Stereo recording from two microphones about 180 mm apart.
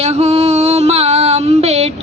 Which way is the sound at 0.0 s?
35° right (ahead or behind).